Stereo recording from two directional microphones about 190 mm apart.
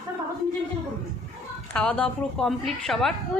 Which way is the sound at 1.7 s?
5° left (ahead or behind).